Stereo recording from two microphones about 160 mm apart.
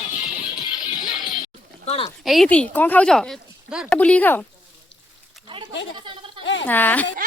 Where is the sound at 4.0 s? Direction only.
10° left (ahead or behind).